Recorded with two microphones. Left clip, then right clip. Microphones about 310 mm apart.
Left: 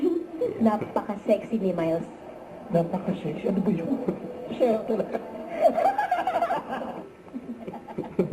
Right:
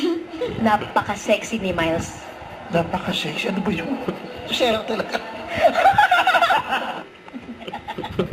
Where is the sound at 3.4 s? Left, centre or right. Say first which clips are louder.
Right 4 dB; centre.